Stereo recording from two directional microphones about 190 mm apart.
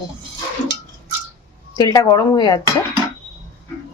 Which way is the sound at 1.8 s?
20° left (ahead or behind).